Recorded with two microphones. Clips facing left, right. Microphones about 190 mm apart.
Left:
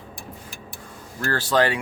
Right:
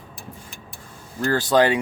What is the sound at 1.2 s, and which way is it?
Speech, 15° right (ahead or behind).